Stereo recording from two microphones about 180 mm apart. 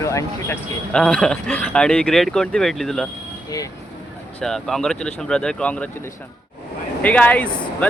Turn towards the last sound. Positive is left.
turn(degrees=10)  # may be behind; listen again after turning